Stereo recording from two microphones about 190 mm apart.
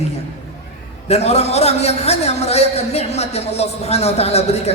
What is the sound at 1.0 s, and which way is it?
A man's voice, 35° left (ahead or behind).